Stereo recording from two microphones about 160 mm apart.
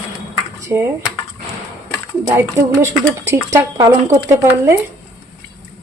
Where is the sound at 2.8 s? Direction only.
20° right (ahead or behind).